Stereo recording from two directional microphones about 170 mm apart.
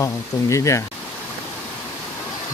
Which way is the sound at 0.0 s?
20° left (ahead or behind).